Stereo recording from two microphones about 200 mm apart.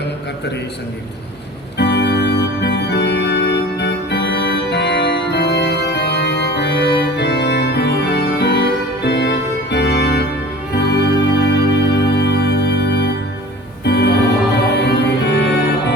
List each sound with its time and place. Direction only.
1.8 s organ: 60° left (ahead or behind)
9.0 s music: 55° left (ahead or behind)